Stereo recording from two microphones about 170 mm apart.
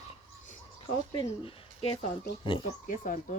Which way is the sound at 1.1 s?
30° left (ahead or behind).